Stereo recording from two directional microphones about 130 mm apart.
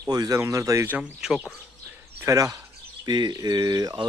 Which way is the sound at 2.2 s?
25° right (ahead or behind).